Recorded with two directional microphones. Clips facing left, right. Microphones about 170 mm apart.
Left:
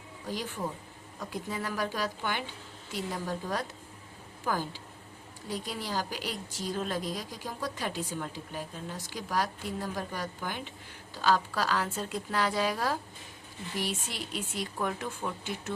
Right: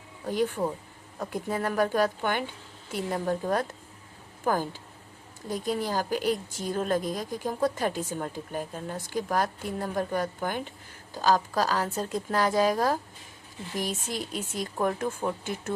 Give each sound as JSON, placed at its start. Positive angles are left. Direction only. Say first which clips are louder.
{"t": 0.3, "sound": "a woman's voice", "louder": "right 8 dB", "side_deg": -55}